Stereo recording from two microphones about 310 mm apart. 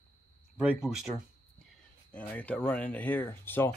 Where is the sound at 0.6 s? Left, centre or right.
Centre.